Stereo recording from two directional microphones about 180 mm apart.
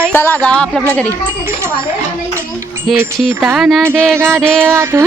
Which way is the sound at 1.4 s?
15° right (ahead or behind).